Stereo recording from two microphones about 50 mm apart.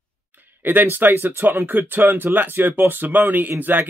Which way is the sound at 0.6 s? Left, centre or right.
Right.